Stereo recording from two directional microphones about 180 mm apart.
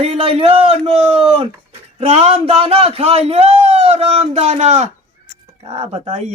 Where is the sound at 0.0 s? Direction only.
35° right (ahead or behind).